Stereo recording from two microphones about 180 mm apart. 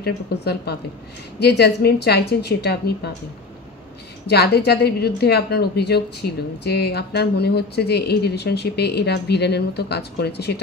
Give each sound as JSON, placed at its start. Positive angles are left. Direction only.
{"t": 0.0, "sound": "a woman's voice", "side_deg": 65}
{"t": 4.3, "sound": "a woman's voice", "side_deg": 65}